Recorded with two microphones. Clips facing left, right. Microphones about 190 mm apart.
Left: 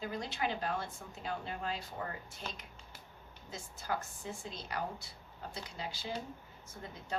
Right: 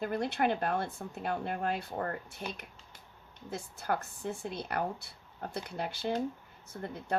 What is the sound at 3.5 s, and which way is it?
Speech, 60° right (ahead or behind).